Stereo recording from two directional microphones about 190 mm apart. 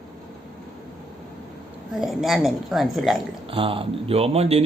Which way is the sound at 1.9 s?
Centre (ahead or behind).